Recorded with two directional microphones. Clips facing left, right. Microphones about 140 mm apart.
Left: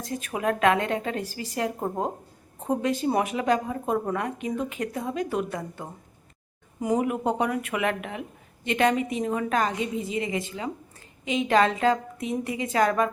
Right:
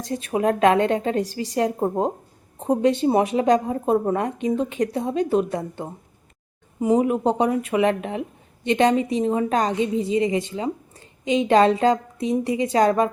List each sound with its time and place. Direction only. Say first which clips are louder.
0.0 s a woman's voice: right 6 dB; 30° right (ahead or behind)